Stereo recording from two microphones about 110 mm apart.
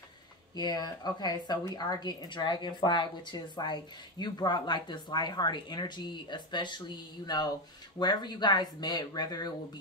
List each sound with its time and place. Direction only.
0.6 s a woman's voice: 40° left (ahead or behind)